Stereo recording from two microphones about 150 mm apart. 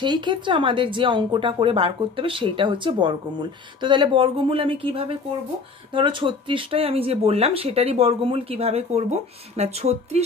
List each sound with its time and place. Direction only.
0.0 s speech: 30° right (ahead or behind)